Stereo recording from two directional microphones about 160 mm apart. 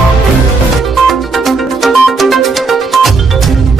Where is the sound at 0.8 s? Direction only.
Centre (ahead or behind).